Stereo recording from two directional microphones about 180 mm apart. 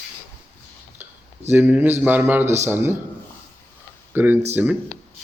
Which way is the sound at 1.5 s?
10° right (ahead or behind).